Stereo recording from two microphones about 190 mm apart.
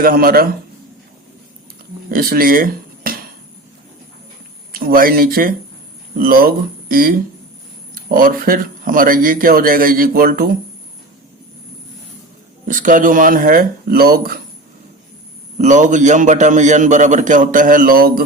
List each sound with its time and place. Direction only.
0.0 s speech: 50° right (ahead or behind)
2.0 s speech: 50° right (ahead or behind)
4.7 s speech: 50° right (ahead or behind)
12.6 s speech: 45° right (ahead or behind)
15.5 s a man's voice: 40° right (ahead or behind)